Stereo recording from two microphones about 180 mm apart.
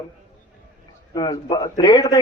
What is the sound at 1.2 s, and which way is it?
A man's voice, 20° left (ahead or behind).